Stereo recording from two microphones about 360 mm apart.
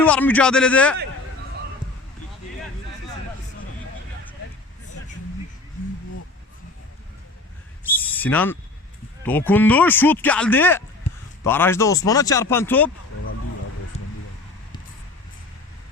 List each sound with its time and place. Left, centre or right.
0.0 s speech: centre
7.9 s a sound: centre
9.2 s speech: centre